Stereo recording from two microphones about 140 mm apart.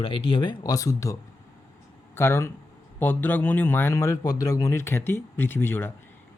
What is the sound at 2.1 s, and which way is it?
A man's voice, 15° left (ahead or behind).